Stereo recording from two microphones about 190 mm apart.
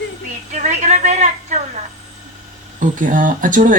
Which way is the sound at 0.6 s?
35° right (ahead or behind).